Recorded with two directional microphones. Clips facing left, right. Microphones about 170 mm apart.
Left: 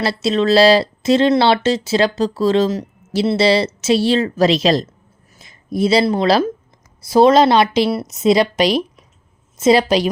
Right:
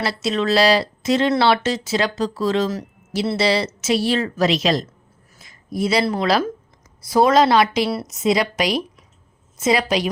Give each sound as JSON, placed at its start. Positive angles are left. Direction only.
{"t": 0.0, "sound": "a woman's voice", "side_deg": 30}